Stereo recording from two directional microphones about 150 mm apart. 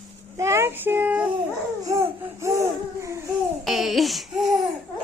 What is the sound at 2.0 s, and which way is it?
Laughter, 20° right (ahead or behind).